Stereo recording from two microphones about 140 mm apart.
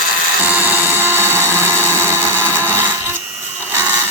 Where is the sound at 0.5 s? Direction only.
15° right (ahead or behind).